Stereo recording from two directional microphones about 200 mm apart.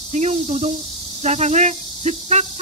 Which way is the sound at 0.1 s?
35° right (ahead or behind).